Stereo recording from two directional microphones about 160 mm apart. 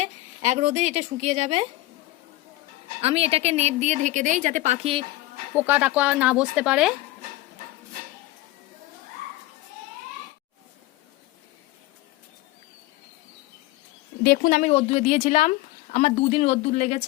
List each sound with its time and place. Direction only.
0.0 s a woman's voice: 45° right (ahead or behind)
3.0 s a woman's voice: 40° right (ahead or behind)
5.5 s speech: 10° right (ahead or behind)
14.3 s speech: 60° left (ahead or behind)
14.7 s speech: 35° left (ahead or behind)